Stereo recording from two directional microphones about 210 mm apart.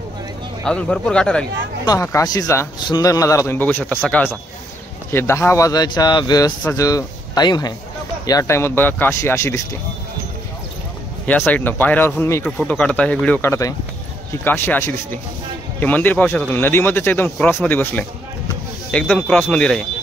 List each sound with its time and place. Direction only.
0.7 s speech: 5° left (ahead or behind)
1.9 s a man's voice: 15° left (ahead or behind)
11.2 s a man's voice: 10° left (ahead or behind)